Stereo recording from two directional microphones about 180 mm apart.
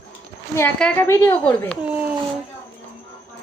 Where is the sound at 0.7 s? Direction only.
10° left (ahead or behind).